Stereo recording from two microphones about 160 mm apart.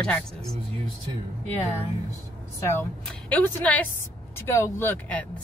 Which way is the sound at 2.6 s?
15° left (ahead or behind).